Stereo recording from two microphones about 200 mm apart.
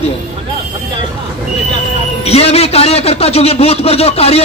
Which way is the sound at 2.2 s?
30° left (ahead or behind).